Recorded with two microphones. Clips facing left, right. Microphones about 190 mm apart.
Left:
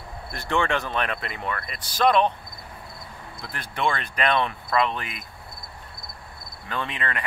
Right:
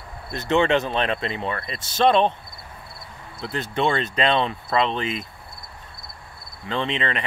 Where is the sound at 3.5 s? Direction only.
25° right (ahead or behind).